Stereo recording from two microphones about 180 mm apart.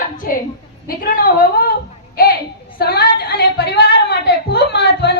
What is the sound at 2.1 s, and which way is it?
Female singing, 55° left (ahead or behind).